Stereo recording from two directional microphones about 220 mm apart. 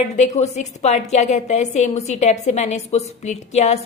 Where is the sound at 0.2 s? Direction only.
30° left (ahead or behind).